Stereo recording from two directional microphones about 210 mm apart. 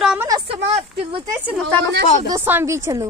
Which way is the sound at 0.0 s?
5° right (ahead or behind).